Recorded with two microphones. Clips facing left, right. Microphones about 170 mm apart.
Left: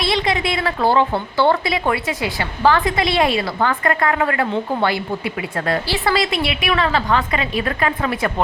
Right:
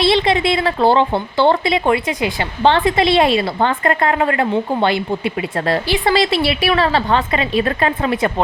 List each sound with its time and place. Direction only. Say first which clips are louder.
0.0 s a woman's voice: right 5 dB; 30° right (ahead or behind)
6.3 s a woman's voice: right 4 dB; 35° right (ahead or behind)